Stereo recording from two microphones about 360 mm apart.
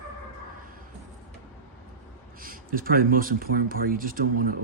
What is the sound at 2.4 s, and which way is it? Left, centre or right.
Speech, right.